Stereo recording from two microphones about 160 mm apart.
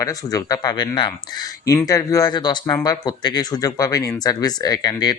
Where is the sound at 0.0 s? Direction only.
20° left (ahead or behind).